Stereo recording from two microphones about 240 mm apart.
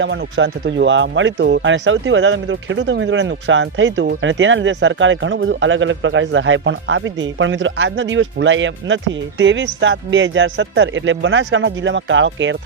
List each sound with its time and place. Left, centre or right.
0.0 s speech: right